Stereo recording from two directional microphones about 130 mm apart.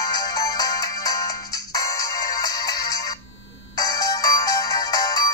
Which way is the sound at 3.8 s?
30° left (ahead or behind).